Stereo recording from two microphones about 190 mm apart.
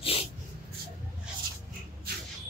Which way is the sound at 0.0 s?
30° left (ahead or behind).